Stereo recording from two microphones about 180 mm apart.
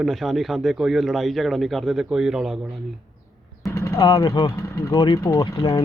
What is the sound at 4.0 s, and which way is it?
Speech, 25° left (ahead or behind).